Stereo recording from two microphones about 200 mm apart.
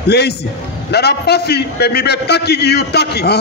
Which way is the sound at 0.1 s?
55° left (ahead or behind).